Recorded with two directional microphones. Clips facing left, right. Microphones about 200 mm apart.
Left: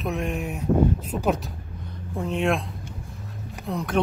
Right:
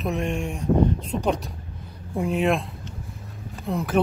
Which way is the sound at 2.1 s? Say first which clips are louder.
Right 2 dB; 10° right (ahead or behind).